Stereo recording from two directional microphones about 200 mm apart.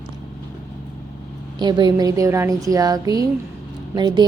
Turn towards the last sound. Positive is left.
turn(degrees=-20)  # may be behind; listen again after turning